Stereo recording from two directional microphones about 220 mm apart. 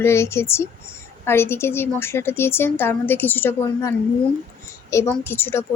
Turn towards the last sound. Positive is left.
turn(degrees=10)  # may be behind; listen again after turning